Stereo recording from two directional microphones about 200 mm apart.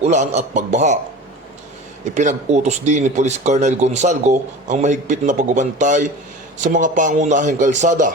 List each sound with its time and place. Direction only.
0.0 s speech: 35° right (ahead or behind)
2.1 s speech: 35° right (ahead or behind)